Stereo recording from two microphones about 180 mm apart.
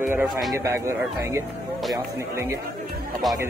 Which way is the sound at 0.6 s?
15° right (ahead or behind).